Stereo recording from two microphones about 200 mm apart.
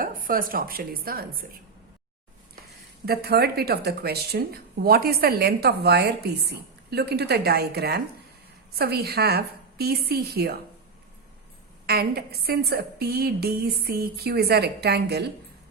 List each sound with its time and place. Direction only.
0.0 s a woman's voice: 45° right (ahead or behind)
3.1 s a woman's voice: 50° right (ahead or behind)
11.9 s a woman's voice: 50° right (ahead or behind)